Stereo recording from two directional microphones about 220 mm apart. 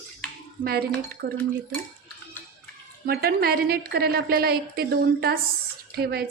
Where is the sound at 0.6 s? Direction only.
45° right (ahead or behind).